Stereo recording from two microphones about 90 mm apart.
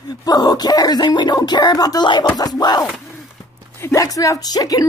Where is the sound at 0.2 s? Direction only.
45° left (ahead or behind).